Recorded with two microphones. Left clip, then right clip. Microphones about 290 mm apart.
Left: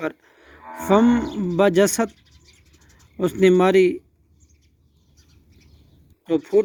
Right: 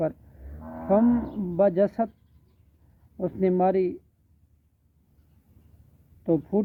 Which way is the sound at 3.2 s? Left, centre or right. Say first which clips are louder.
Left 7 dB; left.